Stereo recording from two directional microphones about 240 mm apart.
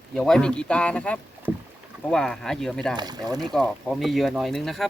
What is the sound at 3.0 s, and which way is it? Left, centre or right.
Speech, centre.